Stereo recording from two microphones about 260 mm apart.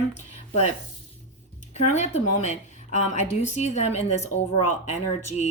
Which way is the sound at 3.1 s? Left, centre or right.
Left.